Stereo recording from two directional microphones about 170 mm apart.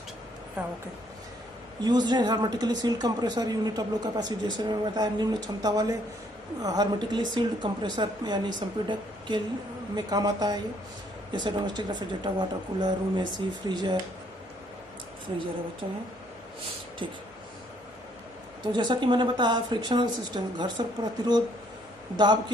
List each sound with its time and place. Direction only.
0.6 s a sound: 10° right (ahead or behind)
1.8 s a woman's voice: 25° right (ahead or behind)
15.3 s speech: 35° right (ahead or behind)
18.7 s a woman's voice: 25° right (ahead or behind)